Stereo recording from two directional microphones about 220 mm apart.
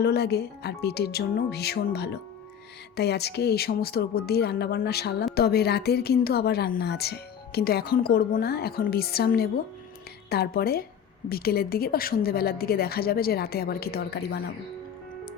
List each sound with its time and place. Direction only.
0.0 s speech: 45° left (ahead or behind)